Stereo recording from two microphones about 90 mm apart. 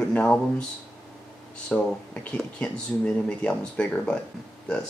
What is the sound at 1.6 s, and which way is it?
Speech, 15° left (ahead or behind).